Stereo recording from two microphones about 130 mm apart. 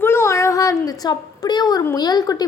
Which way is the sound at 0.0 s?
20° left (ahead or behind).